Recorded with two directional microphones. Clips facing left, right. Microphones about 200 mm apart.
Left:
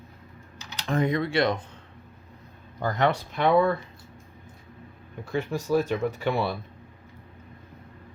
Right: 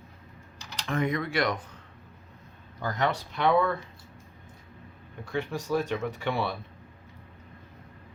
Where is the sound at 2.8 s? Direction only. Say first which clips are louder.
Left 4 dB; 55° left (ahead or behind).